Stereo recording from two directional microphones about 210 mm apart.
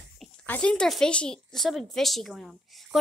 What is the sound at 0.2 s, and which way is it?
A woman's voice, 5° left (ahead or behind).